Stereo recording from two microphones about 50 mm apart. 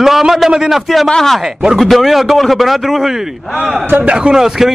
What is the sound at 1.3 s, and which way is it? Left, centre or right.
A man's voice, centre.